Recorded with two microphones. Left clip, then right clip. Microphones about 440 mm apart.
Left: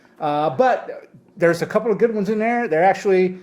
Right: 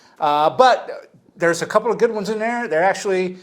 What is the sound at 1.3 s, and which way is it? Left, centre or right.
Speech, right.